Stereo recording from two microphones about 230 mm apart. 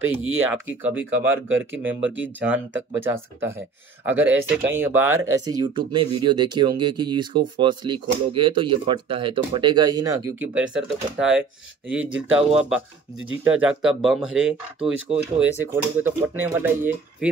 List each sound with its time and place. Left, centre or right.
0.0 s speech: right
0.5 s speech: centre
2.0 s speech: right
2.2 s speech: centre